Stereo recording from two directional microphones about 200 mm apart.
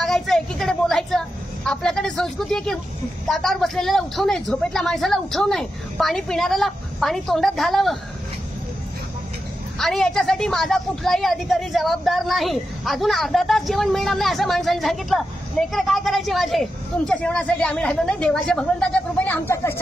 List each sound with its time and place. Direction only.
0.0 s a sound: centre (ahead or behind)
3.3 s a woman's voice: centre (ahead or behind)
9.8 s a woman's voice: centre (ahead or behind)